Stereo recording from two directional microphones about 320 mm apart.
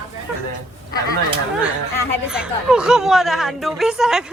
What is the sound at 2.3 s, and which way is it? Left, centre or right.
Speech, centre.